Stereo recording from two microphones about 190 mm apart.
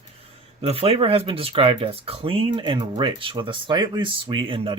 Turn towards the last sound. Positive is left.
turn(degrees=-30)  # may be behind; listen again after turning